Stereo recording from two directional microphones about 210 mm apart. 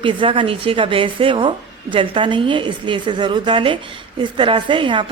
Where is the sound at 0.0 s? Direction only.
25° right (ahead or behind).